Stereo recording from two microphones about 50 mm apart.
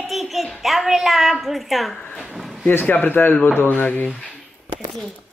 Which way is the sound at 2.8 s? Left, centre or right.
Left.